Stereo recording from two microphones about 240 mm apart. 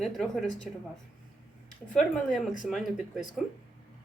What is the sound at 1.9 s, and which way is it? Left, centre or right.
A woman's voice, centre.